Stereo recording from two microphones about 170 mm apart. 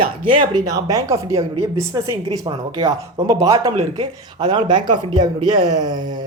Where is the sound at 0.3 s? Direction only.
30° right (ahead or behind).